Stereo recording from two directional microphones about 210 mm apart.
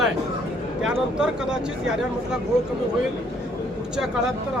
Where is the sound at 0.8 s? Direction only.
5° right (ahead or behind).